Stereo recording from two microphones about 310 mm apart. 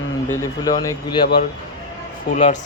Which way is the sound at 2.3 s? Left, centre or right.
Left.